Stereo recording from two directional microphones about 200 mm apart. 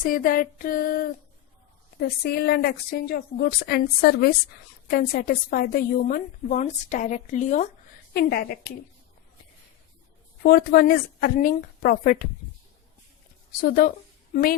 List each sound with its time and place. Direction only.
0.0 s a woman's voice: 45° left (ahead or behind)
8.1 s a woman's voice: 50° left (ahead or behind)
10.4 s a woman's voice: 50° left (ahead or behind)
13.6 s a woman's voice: 45° left (ahead or behind)